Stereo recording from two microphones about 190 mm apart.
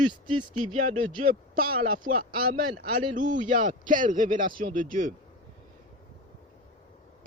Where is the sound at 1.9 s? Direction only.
45° right (ahead or behind).